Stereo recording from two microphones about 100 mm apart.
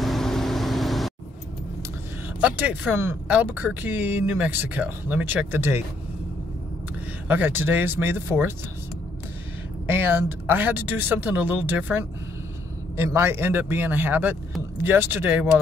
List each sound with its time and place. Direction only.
0.0 s vehicle: 5° left (ahead or behind)
2.4 s speech: 15° right (ahead or behind)
7.2 s speech: 20° right (ahead or behind)
9.8 s speech: 20° right (ahead or behind)